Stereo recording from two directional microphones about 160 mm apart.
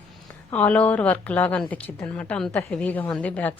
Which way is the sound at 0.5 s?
10° left (ahead or behind).